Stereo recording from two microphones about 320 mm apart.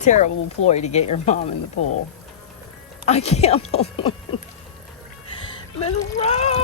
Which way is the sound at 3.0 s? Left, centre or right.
Centre.